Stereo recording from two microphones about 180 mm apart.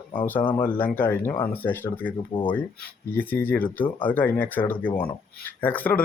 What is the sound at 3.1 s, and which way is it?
Speech, 10° left (ahead or behind).